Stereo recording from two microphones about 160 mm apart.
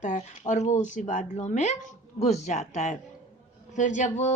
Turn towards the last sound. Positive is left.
turn(degrees=50)  # may be behind; listen again after turning